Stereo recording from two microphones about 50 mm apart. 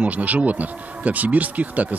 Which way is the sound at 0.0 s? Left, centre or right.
Right.